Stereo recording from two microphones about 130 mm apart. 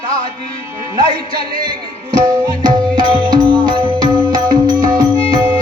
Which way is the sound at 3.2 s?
35° right (ahead or behind).